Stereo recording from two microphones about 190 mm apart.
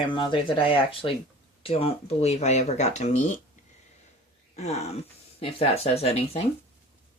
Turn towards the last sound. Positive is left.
turn(degrees=30)  # may be behind; listen again after turning